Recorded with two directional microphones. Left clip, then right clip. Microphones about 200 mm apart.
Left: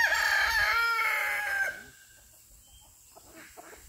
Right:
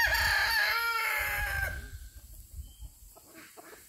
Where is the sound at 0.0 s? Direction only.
5° right (ahead or behind).